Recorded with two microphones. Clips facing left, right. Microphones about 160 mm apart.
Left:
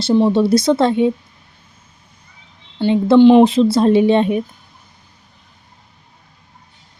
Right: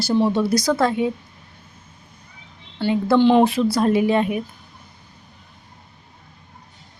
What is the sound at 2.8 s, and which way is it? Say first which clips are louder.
Speech: left 7 dB; 20° left (ahead or behind).